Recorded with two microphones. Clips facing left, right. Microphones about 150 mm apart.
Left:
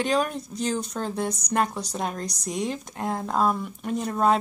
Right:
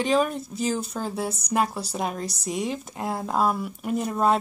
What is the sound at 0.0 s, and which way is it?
Speech, centre (ahead or behind).